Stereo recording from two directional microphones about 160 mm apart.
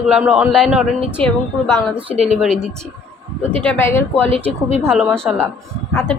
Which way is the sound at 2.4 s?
Centre (ahead or behind).